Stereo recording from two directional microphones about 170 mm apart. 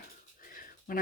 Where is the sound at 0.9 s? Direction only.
55° left (ahead or behind).